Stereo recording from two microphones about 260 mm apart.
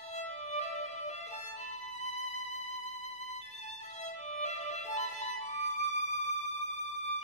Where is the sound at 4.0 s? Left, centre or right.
Left.